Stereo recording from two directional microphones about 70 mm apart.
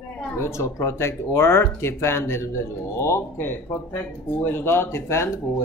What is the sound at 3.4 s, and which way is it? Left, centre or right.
Speech, left.